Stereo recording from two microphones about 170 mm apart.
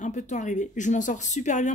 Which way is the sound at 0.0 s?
45° left (ahead or behind).